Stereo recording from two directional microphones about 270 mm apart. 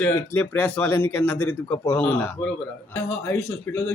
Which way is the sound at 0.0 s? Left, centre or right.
Centre.